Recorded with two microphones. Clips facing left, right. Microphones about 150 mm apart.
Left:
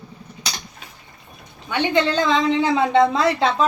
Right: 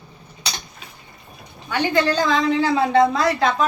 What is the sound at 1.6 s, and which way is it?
A woman's voice, 20° left (ahead or behind).